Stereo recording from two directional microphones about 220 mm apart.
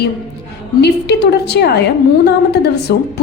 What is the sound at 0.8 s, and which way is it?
A woman's voice, 50° left (ahead or behind).